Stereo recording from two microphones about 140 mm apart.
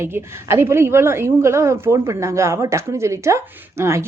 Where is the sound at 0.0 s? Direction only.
20° right (ahead or behind).